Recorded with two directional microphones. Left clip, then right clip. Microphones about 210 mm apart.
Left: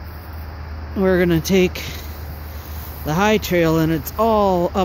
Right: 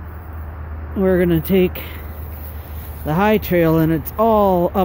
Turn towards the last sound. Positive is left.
turn(degrees=-10)  # may be behind; listen again after turning